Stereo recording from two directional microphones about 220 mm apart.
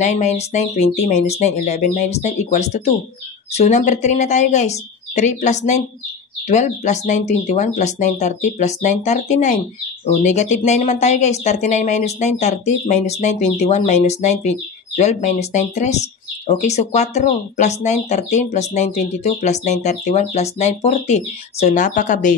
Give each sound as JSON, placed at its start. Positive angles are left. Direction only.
{"t": 0.0, "sound": "speech", "side_deg": 30}